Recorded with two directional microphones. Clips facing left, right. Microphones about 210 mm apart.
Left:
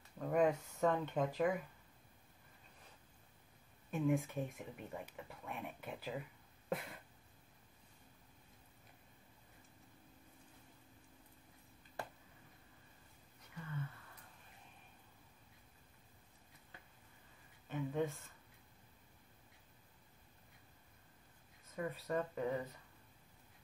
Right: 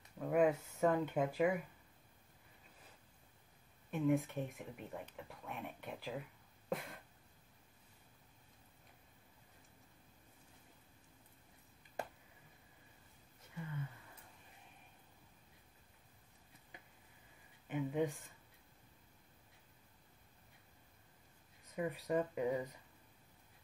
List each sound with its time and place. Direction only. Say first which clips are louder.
0.2 s speech: right 1 dB; 5° right (ahead or behind)
3.9 s speech: right 1 dB; centre (ahead or behind)
6.7 s a sound: even; centre (ahead or behind)
16.7 s a sound: right 2 dB; 15° right (ahead or behind)
17.6 s speech: right 2 dB; 15° right (ahead or behind)
21.7 s speech: right 3 dB; 15° right (ahead or behind)